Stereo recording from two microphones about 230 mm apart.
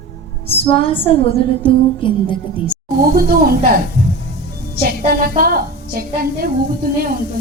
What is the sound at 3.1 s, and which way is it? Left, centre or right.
A woman's voice, right.